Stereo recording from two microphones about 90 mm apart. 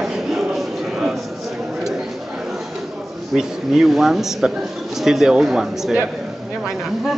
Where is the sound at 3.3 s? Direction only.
5° right (ahead or behind).